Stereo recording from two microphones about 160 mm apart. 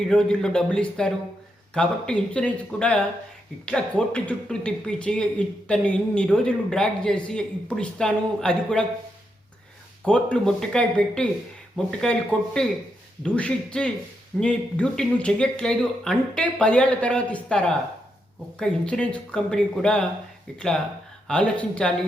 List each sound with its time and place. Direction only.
0.1 s speech: 5° left (ahead or behind)
10.0 s speech: 5° left (ahead or behind)
21.2 s speech: 5° left (ahead or behind)